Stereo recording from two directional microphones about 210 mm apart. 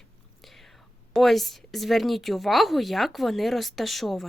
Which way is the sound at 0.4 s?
Centre (ahead or behind).